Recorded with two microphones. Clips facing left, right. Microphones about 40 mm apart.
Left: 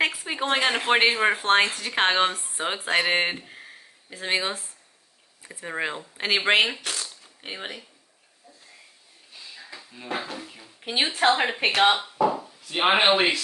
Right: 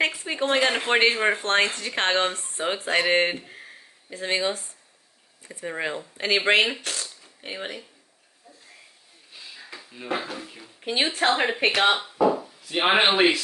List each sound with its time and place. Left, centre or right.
0.0 s a man's voice: centre
4.2 s speech: left
5.4 s speech: centre
6.3 s speech: centre
9.3 s speech: centre